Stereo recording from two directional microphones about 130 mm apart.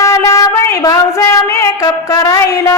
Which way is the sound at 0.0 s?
25° left (ahead or behind).